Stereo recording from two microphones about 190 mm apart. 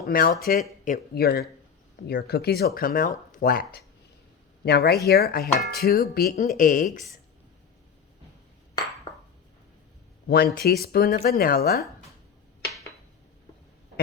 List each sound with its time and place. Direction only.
0.1 s speech: 50° left (ahead or behind)
10.2 s speech: 50° left (ahead or behind)